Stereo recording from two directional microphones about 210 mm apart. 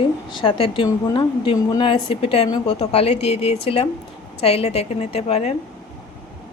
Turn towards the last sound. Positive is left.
turn(degrees=30)  # may be behind; listen again after turning